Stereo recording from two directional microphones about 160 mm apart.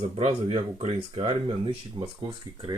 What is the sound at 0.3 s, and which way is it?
Speech, 40° right (ahead or behind).